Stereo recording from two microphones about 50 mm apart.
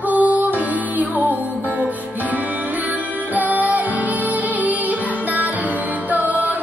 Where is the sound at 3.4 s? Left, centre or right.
Right.